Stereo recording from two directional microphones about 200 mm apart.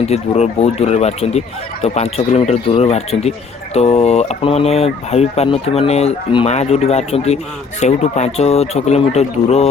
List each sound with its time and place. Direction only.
0.0 s speech: 35° left (ahead or behind)